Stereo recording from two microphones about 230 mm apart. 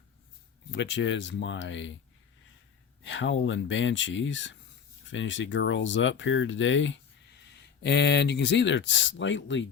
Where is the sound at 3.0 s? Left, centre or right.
Left.